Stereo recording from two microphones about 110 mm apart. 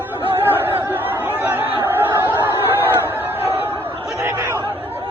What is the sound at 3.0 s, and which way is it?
Crowd, 20° right (ahead or behind).